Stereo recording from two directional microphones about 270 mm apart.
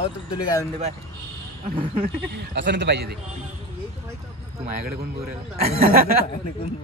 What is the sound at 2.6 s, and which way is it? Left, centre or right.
Speech, right.